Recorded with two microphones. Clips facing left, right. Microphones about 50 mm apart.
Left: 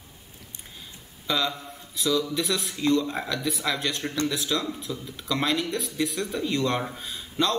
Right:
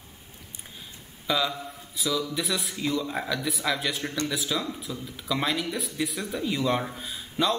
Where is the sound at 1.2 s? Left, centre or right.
Centre.